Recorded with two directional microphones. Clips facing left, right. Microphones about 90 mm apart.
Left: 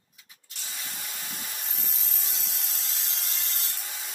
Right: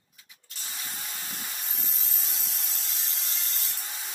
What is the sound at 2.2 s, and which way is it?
Tools, 70° left (ahead or behind).